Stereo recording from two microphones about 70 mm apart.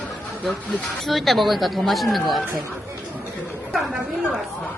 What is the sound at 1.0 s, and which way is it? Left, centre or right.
Speech, centre.